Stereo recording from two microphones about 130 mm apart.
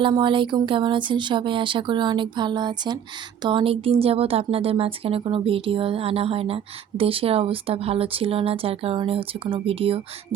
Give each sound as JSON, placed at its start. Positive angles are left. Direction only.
{"t": 0.0, "sound": "speech", "side_deg": -40}